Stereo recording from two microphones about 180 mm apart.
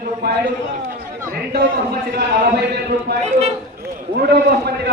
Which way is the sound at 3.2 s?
35° right (ahead or behind).